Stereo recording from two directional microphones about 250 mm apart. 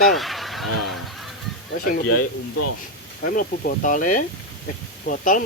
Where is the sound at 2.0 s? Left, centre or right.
Left.